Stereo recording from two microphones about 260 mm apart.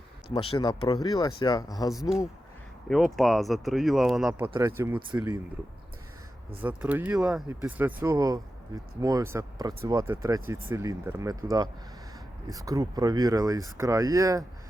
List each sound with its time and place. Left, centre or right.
0.3 s speech: left
1.9 s speech: centre
6.6 s speech: centre